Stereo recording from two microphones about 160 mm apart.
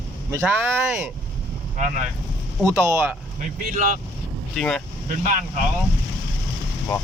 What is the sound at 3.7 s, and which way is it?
Speech, 55° right (ahead or behind).